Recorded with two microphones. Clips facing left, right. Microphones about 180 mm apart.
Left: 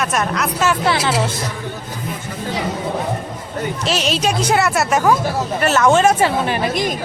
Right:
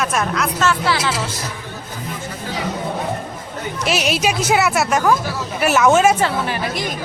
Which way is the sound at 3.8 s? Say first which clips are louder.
Right 1 dB; 10° right (ahead or behind).